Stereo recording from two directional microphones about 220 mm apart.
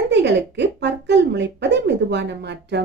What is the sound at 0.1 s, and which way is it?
Speech, 55° right (ahead or behind).